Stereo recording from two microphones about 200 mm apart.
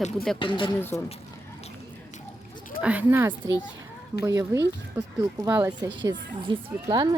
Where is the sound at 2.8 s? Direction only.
10° right (ahead or behind).